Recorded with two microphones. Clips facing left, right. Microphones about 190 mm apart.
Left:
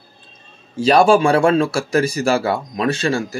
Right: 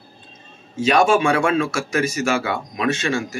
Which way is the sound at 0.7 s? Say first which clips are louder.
Left 4 dB; 35° left (ahead or behind).